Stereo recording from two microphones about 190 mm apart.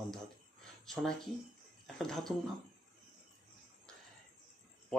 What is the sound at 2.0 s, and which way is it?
Speech, centre (ahead or behind).